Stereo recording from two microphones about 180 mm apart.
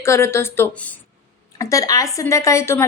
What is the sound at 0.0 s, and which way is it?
Speech, 15° left (ahead or behind).